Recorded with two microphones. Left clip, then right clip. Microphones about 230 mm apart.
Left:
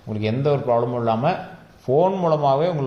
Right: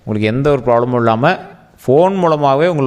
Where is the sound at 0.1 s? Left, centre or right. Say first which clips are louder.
Right 8 dB; right.